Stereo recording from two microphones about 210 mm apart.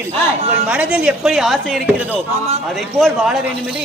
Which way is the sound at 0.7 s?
5° right (ahead or behind).